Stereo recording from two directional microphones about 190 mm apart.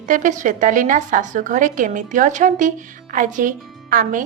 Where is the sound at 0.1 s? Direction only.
45° right (ahead or behind).